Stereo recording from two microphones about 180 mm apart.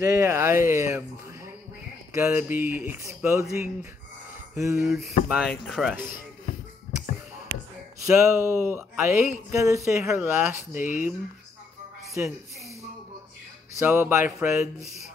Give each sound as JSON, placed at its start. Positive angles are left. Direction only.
{"t": 0.0, "sound": "speech", "side_deg": -15}
{"t": 4.6, "sound": "speech", "side_deg": -15}
{"t": 4.8, "sound": "speech", "side_deg": 0}
{"t": 8.0, "sound": "speech", "side_deg": -15}
{"t": 10.8, "sound": "speech", "side_deg": 45}
{"t": 12.2, "sound": "speech", "side_deg": -10}
{"t": 13.7, "sound": "speech", "side_deg": -10}
{"t": 14.8, "sound": "speech", "side_deg": 40}